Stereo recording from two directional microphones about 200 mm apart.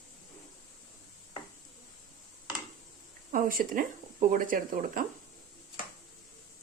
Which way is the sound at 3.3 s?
40° right (ahead or behind).